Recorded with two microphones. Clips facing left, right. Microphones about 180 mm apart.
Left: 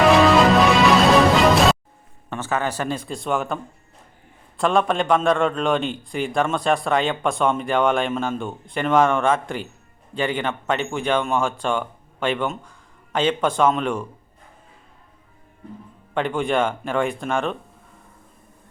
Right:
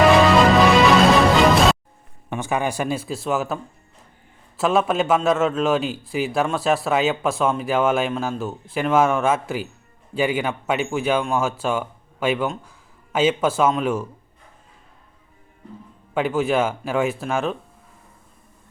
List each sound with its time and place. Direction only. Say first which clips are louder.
0.0 s music: even; centre (ahead or behind)
2.3 s a man's voice: right 1 dB; 15° right (ahead or behind)
16.1 s a man's voice: right 1 dB; 5° right (ahead or behind)